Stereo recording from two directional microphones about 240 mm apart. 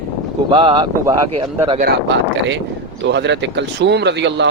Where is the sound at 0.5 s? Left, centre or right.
Centre.